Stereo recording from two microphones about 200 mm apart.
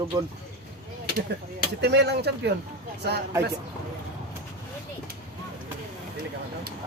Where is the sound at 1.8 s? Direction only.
55° right (ahead or behind).